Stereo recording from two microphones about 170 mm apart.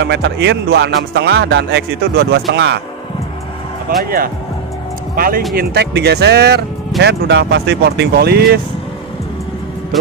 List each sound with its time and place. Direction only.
0.0 s speech: 90° right
4.0 s speech: 60° right (ahead or behind)
5.6 s speech: 75° right (ahead or behind)
7.0 s speech: 90° right; by 8.5 s 70° right (ahead or behind)